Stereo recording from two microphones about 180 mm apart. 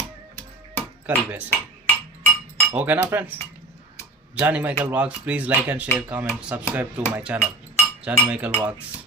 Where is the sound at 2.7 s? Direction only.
10° right (ahead or behind).